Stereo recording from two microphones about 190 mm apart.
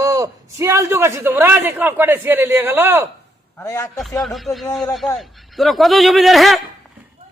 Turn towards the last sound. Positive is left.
turn(degrees=0)  # may be behind; listen again after turning